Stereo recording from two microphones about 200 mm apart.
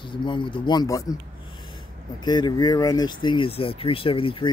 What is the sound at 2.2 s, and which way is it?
Speech, 20° left (ahead or behind).